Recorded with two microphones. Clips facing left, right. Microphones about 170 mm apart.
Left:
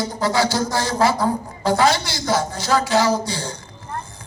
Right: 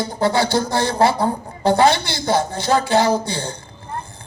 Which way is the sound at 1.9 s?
60° right (ahead or behind).